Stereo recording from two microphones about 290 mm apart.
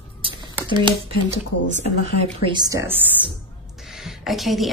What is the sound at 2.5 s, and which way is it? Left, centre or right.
Speech, centre.